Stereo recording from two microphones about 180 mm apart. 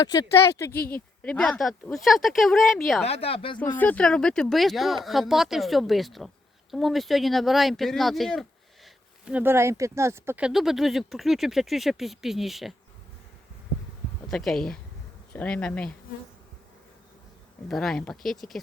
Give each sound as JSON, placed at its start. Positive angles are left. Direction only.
{"t": 0.0, "sound": "speech", "side_deg": 25}
{"t": 3.0, "sound": "speech", "side_deg": 35}
{"t": 3.8, "sound": "speech", "side_deg": 10}
{"t": 14.3, "sound": "speech", "side_deg": 0}
{"t": 17.7, "sound": "speech", "side_deg": 0}